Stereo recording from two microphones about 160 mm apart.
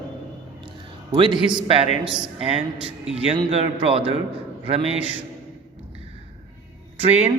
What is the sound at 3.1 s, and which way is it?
Speech, 40° right (ahead or behind).